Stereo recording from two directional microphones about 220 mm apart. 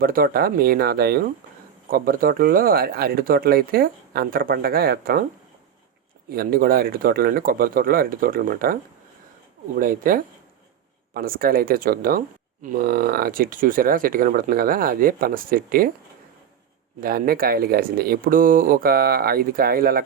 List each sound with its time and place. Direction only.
0.0 s speech: 40° right (ahead or behind)
6.3 s speech: 40° right (ahead or behind)
17.0 s speech: 40° right (ahead or behind)